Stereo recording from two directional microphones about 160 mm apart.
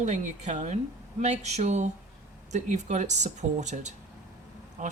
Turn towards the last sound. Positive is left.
turn(degrees=-50)  # may be behind; listen again after turning